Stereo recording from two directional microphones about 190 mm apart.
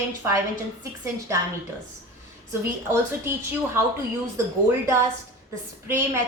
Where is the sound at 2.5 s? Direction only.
15° right (ahead or behind).